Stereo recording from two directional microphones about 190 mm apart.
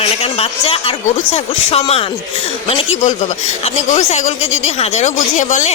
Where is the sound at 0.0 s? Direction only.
30° left (ahead or behind).